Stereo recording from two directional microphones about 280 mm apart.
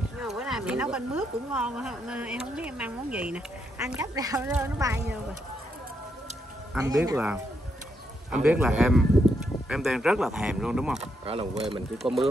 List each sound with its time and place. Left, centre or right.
0.2 s speech: centre
6.7 s speech: centre
11.0 s speech: right
12.0 s speech: centre